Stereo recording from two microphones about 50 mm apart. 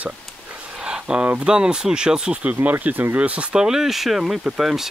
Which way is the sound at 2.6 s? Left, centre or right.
Right.